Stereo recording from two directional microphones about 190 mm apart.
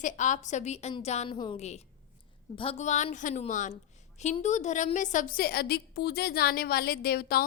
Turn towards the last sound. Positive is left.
turn(degrees=50)  # may be behind; listen again after turning